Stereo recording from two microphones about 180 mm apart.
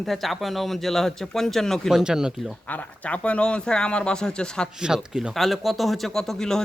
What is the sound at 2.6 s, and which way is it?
Speech, 10° left (ahead or behind).